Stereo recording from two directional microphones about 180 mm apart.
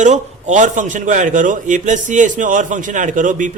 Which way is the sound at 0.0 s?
40° right (ahead or behind).